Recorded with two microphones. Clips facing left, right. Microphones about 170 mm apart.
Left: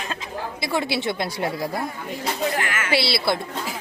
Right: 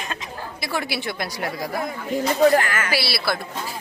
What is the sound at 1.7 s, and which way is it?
Speech, 90° right.